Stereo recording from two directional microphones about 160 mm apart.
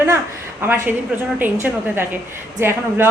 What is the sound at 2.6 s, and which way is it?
Speech, 15° right (ahead or behind).